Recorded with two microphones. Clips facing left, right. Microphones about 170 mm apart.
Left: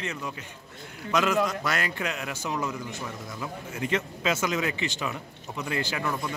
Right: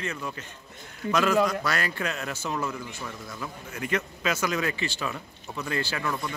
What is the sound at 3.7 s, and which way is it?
Speech, 25° left (ahead or behind).